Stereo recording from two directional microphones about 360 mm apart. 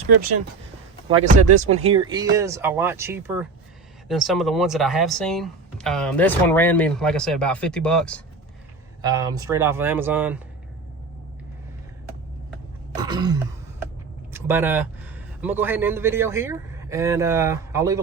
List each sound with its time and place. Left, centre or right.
1.0 s a man's voice: centre
9.0 s speech: centre
13.0 s throat clearing: centre
14.3 s a man's voice: centre